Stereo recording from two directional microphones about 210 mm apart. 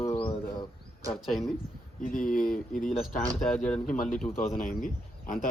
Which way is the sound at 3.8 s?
40° left (ahead or behind).